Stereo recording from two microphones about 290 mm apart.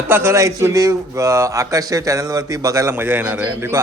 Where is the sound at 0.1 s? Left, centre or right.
Centre.